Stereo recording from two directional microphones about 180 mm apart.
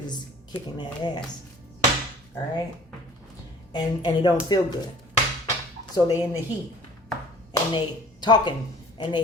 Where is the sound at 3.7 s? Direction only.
25° left (ahead or behind).